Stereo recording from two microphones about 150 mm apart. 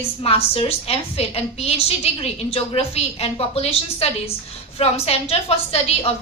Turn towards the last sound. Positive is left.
turn(degrees=40)  # may be behind; listen again after turning